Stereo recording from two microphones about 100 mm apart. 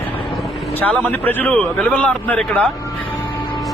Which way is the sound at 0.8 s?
20° left (ahead or behind).